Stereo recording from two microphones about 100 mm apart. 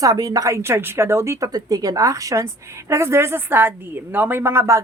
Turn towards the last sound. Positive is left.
turn(degrees=-30)  # may be behind; listen again after turning